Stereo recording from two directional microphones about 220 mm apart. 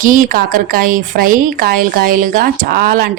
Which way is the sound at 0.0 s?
40° right (ahead or behind).